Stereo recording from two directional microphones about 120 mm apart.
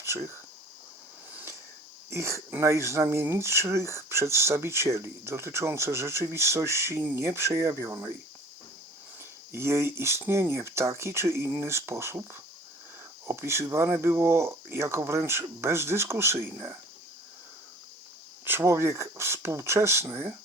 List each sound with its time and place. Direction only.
0.0 s a sound: 20° right (ahead or behind)
2.0 s speech: 25° right (ahead or behind)
9.5 s speech: 20° right (ahead or behind)
18.4 s speech: 20° right (ahead or behind)